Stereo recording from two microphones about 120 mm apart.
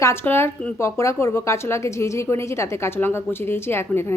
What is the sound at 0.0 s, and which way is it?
Speech, 20° left (ahead or behind).